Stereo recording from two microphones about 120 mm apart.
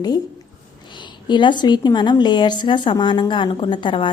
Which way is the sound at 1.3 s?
40° left (ahead or behind).